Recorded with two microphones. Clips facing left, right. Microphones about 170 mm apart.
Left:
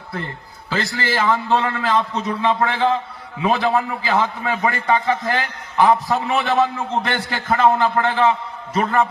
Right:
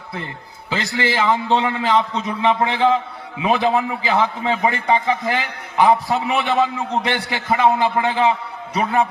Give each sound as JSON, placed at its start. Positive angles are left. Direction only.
{"t": 0.7, "sound": "a man's voice", "side_deg": -20}